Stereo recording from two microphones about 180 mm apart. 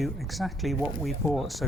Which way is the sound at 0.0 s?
Centre (ahead or behind).